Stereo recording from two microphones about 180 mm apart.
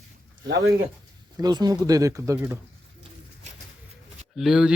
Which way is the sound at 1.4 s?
20° right (ahead or behind).